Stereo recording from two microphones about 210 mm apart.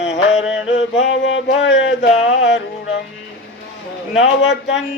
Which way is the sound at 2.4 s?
55° left (ahead or behind).